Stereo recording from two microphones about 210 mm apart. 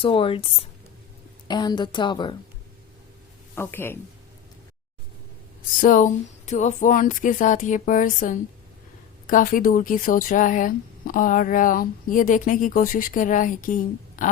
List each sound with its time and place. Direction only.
0.0 s speech: 25° left (ahead or behind)
3.5 s speech: 10° left (ahead or behind)
5.8 s speech: 40° left (ahead or behind)